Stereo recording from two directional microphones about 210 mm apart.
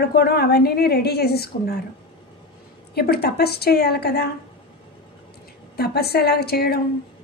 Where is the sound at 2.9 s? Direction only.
45° left (ahead or behind).